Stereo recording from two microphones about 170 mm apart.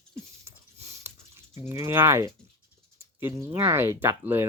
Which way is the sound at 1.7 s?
15° right (ahead or behind).